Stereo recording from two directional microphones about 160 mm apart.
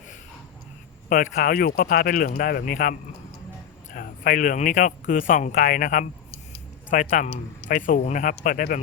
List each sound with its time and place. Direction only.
1.1 s speech: 60° left (ahead or behind)